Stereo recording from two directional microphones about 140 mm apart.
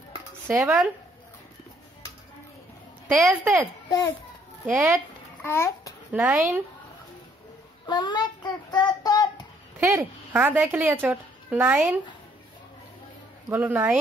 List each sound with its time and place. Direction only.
0.5 s speech: 20° right (ahead or behind)
3.2 s a woman's voice: centre (ahead or behind)
4.6 s speech: 10° right (ahead or behind)
5.4 s a child's voice: 20° left (ahead or behind)
6.1 s speech: 5° right (ahead or behind)
7.8 s child singing: 30° left (ahead or behind)
9.8 s speech: 20° right (ahead or behind)
13.5 s speech: 10° right (ahead or behind)